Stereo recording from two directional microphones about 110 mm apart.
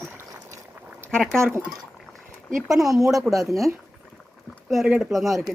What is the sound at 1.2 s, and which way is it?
Speech, 25° right (ahead or behind).